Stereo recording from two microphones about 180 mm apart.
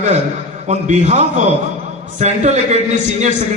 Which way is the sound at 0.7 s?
40° right (ahead or behind).